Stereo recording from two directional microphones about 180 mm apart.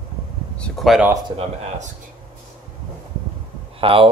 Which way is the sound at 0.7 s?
Centre (ahead or behind).